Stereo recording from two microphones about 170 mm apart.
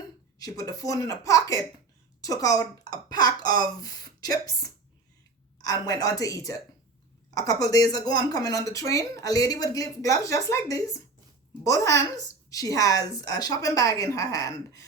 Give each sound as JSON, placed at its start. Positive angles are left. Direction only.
{"t": 0.3, "sound": "speech", "side_deg": 20}